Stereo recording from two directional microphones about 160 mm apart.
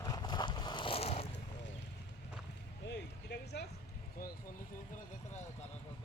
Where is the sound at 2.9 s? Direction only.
90° left.